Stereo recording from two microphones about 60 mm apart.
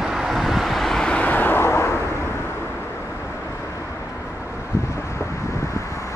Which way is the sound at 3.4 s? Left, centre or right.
Left.